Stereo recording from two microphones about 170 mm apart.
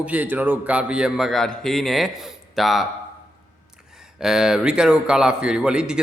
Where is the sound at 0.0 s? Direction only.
10° right (ahead or behind).